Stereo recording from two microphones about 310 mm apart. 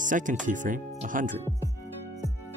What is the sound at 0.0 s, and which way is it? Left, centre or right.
Speech, right.